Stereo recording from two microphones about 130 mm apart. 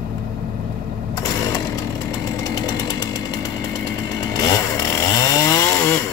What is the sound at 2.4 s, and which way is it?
Chainsaw, 30° left (ahead or behind).